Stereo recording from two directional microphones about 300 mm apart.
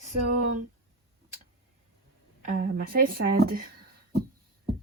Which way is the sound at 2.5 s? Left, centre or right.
Right.